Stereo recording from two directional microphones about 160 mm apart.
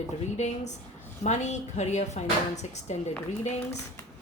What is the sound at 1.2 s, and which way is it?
Speech, 45° left (ahead or behind).